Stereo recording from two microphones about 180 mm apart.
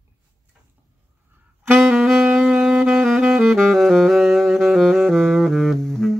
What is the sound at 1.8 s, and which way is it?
Saxophone, 5° right (ahead or behind).